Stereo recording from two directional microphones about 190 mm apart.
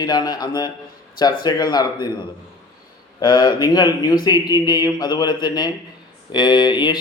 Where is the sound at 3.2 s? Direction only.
20° left (ahead or behind).